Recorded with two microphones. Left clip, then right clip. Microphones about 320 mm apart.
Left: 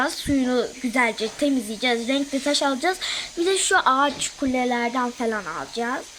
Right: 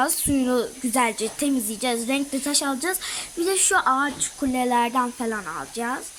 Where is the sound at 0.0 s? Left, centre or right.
Centre.